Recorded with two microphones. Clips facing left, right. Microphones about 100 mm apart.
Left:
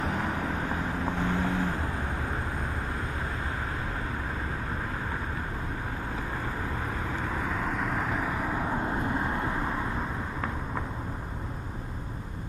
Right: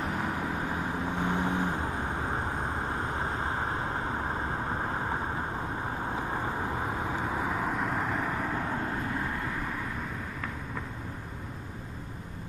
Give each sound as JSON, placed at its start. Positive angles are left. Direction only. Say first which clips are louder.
{"t": 1.2, "sound": "vehicle", "louder": "even", "side_deg": -20}
{"t": 2.9, "sound": "vehicle", "louder": "right 2 dB", "side_deg": -30}
{"t": 6.1, "sound": "vehicle", "louder": "right 2 dB", "side_deg": -20}
{"t": 9.1, "sound": "vehicle", "louder": "left 3 dB", "side_deg": 25}